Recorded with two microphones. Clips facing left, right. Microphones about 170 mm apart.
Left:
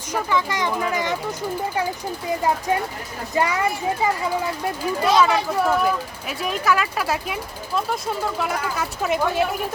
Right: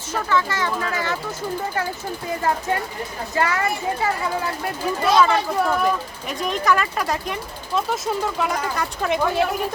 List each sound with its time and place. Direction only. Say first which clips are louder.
0.1 s a child's voice: even; 15° left (ahead or behind)
3.3 s a child's voice: left 1 dB; 15° left (ahead or behind)
5.0 s speech: right 1 dB; 5° left (ahead or behind)